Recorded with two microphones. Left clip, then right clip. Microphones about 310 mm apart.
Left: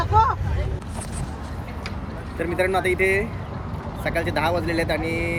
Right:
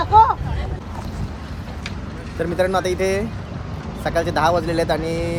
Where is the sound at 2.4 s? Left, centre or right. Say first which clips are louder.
Right 2 dB; centre.